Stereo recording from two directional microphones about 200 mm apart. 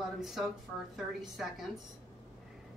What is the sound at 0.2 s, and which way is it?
A woman's voice, centre (ahead or behind).